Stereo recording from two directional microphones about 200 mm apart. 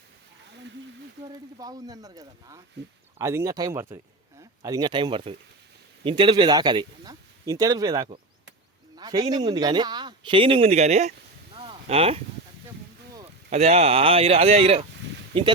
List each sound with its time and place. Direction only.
1.5 s speech: 20° right (ahead or behind); by 11.1 s 35° right (ahead or behind)
11.5 s a sound: 25° right (ahead or behind)
13.5 s speech: 35° right (ahead or behind)